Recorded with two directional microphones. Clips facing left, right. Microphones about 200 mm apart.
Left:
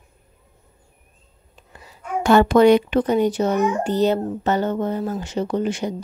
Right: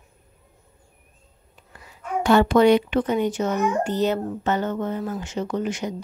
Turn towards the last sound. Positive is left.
turn(degrees=30)  # may be behind; listen again after turning